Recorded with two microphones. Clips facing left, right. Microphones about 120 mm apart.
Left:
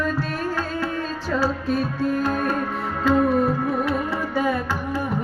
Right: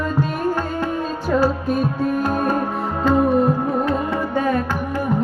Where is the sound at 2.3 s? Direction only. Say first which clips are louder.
Right 4 dB; 30° right (ahead or behind).